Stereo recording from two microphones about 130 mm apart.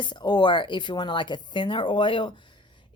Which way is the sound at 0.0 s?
35° left (ahead or behind).